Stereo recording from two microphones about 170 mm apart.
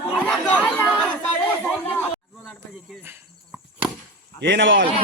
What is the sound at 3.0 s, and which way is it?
Cricket, 10° right (ahead or behind).